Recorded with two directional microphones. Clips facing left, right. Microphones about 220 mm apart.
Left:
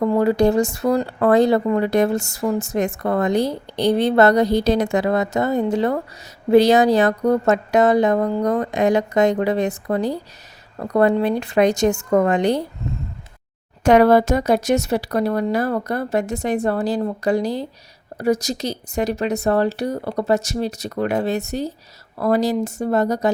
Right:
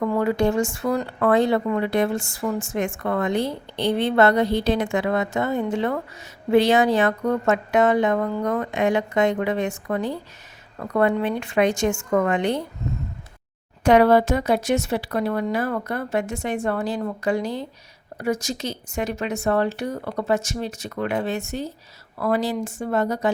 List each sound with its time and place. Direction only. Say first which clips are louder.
0.0 s speech: left 4 dB; 35° left (ahead or behind)
13.8 s speech: left 2 dB; 45° left (ahead or behind)